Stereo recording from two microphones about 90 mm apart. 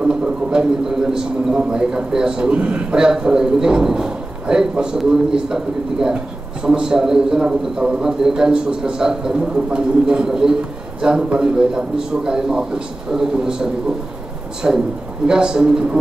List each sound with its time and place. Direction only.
0.0 s a man's voice: 10° right (ahead or behind)